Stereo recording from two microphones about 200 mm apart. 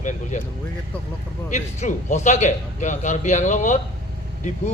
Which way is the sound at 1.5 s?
35° left (ahead or behind).